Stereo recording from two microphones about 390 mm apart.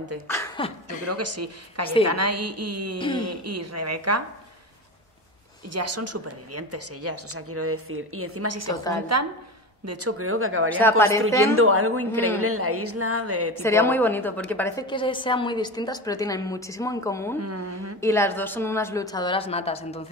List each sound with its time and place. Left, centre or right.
0.3 s beatboxing: centre
1.0 s a woman's voice: right
5.7 s a woman's voice: right
10.8 s a woman's voice: centre
11.4 s a woman's voice: right
13.6 s a woman's voice: centre
17.4 s a woman's voice: right
18.0 s a woman's voice: centre